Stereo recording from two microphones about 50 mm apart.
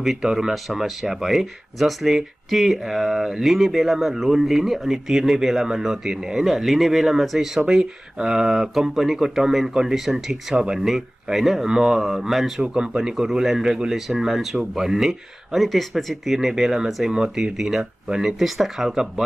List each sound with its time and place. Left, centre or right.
0.0 s speech: centre
11.6 s speech: centre
12.6 s speech: centre